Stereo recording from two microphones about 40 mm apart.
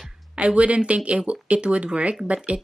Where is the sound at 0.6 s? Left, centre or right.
Right.